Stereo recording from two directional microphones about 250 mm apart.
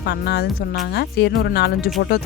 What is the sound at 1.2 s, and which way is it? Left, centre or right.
Speech, left.